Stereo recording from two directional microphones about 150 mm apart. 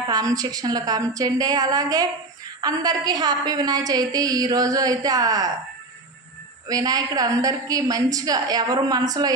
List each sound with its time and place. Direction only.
0.1 s a woman's voice: 25° right (ahead or behind)
6.7 s a woman's voice: 25° right (ahead or behind)